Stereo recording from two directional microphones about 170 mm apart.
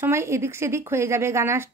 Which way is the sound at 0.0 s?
15° right (ahead or behind).